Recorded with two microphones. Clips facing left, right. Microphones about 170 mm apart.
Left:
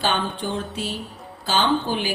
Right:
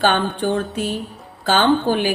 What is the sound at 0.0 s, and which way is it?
Speech, 55° right (ahead or behind).